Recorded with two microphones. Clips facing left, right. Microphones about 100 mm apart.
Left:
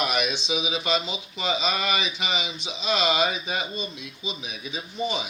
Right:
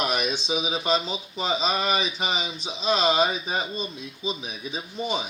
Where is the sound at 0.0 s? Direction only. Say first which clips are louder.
Even; 35° right (ahead or behind).